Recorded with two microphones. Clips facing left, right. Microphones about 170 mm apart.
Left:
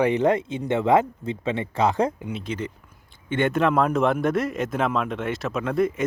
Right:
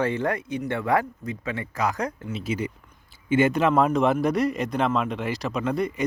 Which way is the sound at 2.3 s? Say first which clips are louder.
Right 1 dB; 5° right (ahead or behind).